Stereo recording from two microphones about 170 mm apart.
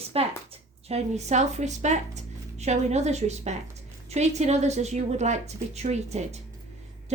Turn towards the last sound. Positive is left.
turn(degrees=-40)  # may be behind; listen again after turning